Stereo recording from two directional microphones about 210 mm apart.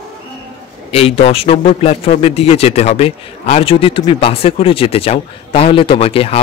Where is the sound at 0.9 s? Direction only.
25° left (ahead or behind).